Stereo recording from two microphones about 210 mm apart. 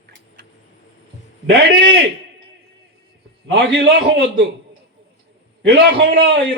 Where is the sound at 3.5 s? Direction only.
55° right (ahead or behind).